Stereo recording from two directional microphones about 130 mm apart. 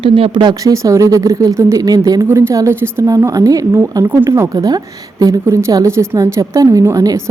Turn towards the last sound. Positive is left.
turn(degrees=-25)  # may be behind; listen again after turning